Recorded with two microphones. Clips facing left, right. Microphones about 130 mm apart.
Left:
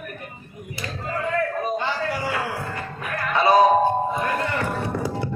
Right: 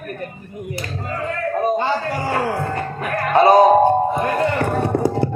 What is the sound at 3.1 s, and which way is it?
Music, 50° right (ahead or behind).